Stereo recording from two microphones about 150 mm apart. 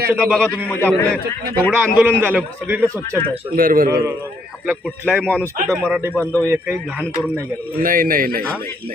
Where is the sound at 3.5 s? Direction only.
70° right (ahead or behind).